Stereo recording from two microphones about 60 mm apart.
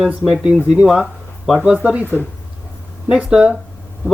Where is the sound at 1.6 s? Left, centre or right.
Right.